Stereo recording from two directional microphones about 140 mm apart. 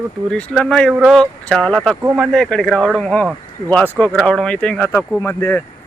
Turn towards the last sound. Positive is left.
turn(degrees=20)  # may be behind; listen again after turning